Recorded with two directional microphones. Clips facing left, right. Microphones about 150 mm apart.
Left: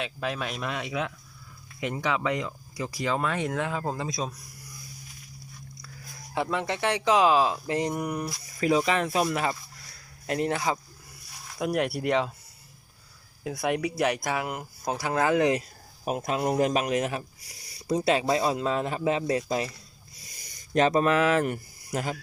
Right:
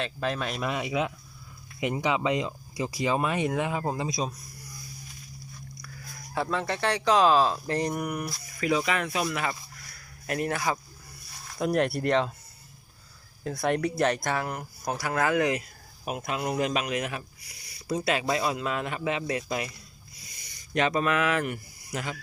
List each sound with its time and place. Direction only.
0.0 s speech: 5° left (ahead or behind)
6.3 s speech: 20° left (ahead or behind)
11.5 s speech: 5° left (ahead or behind)
13.4 s speech: 10° left (ahead or behind); by 15.6 s 25° left (ahead or behind)
16.0 s a man's voice: 40° left (ahead or behind)